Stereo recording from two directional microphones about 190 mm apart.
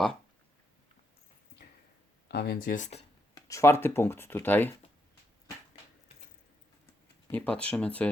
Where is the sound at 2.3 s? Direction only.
55° left (ahead or behind); by 3.1 s 35° left (ahead or behind).